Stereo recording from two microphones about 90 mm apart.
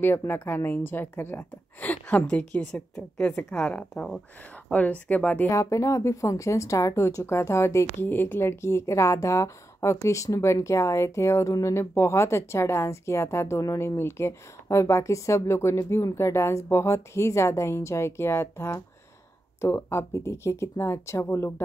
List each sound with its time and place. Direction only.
0.0 s a woman's voice: 25° left (ahead or behind)
5.5 s speech: 35° left (ahead or behind)